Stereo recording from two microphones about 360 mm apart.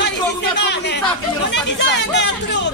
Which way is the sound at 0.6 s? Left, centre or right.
Left.